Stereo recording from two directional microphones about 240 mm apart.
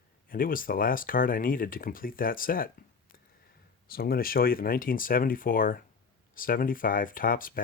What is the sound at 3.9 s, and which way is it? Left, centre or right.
Speech, left.